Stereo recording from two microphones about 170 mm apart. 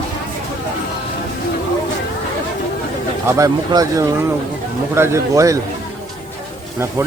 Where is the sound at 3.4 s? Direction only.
20° right (ahead or behind).